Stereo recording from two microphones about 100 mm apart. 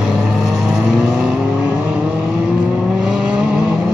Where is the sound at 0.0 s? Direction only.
5° right (ahead or behind).